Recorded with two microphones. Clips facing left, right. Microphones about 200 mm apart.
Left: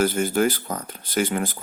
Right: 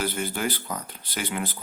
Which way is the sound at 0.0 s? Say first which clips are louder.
Left 8 dB; 45° left (ahead or behind).